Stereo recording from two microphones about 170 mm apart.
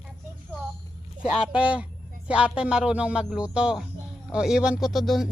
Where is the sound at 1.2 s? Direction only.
5° right (ahead or behind).